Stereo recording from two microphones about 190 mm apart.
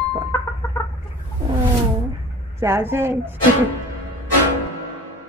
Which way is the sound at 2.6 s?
15° right (ahead or behind).